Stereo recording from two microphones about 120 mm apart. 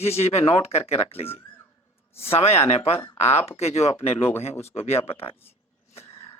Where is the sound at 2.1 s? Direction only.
20° left (ahead or behind).